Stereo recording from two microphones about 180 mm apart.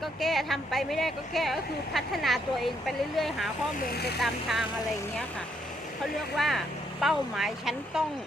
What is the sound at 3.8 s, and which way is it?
Speech, 60° left (ahead or behind).